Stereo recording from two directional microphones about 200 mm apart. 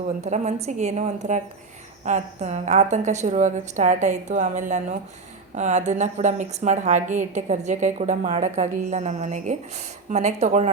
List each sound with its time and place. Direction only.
0.2 s a woman's voice: 35° right (ahead or behind)